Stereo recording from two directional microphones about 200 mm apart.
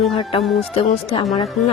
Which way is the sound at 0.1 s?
25° left (ahead or behind).